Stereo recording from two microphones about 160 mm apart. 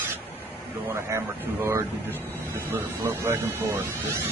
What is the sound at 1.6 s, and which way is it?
Speech, 15° right (ahead or behind).